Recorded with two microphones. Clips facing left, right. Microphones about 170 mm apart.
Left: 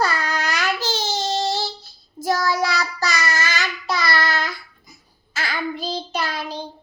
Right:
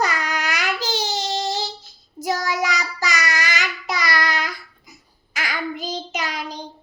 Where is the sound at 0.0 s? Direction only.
15° right (ahead or behind).